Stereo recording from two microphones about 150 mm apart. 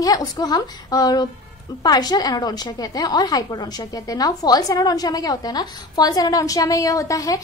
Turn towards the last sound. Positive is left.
turn(degrees=25)  # may be behind; listen again after turning